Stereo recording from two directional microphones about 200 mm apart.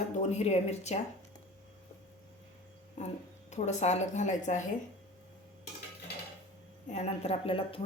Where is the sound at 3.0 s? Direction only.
35° left (ahead or behind).